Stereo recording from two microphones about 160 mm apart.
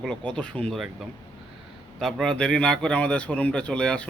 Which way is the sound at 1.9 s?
Centre (ahead or behind).